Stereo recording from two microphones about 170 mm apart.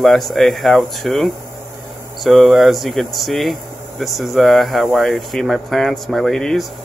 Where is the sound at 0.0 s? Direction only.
Centre (ahead or behind).